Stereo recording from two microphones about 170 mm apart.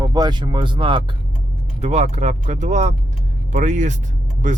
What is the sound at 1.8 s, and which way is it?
Speech, 40° right (ahead or behind).